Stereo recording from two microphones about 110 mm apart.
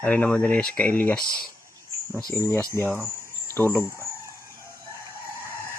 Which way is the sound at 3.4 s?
20° left (ahead or behind).